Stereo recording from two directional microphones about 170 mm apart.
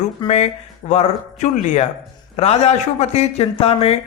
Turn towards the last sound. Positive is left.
turn(degrees=35)  # may be behind; listen again after turning